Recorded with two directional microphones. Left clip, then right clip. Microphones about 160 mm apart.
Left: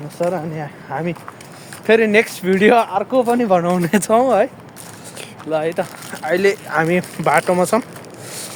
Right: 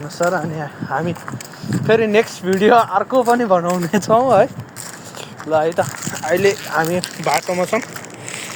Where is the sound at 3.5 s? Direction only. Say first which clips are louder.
Even; 40° left (ahead or behind).